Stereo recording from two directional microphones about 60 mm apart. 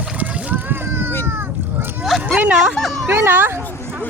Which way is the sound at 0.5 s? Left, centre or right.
Right.